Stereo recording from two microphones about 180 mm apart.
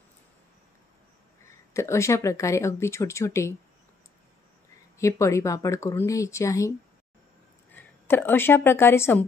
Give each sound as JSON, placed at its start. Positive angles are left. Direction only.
{"t": 1.7, "sound": "speech", "side_deg": 15}
{"t": 4.9, "sound": "speech", "side_deg": 15}
{"t": 7.7, "sound": "a woman's voice", "side_deg": 10}